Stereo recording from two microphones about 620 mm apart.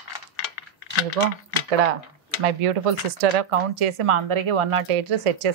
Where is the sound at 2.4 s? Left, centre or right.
Right.